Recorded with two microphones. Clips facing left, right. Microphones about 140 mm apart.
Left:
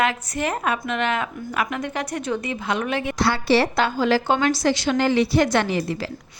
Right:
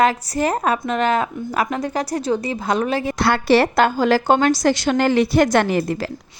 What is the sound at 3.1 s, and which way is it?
A woman's voice, 55° right (ahead or behind).